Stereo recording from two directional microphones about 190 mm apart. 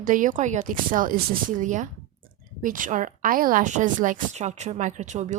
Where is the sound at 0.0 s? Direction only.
45° right (ahead or behind).